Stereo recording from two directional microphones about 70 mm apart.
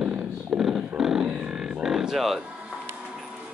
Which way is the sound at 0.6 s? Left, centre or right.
Centre.